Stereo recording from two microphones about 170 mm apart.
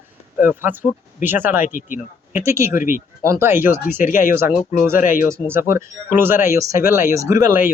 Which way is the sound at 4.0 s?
50° left (ahead or behind).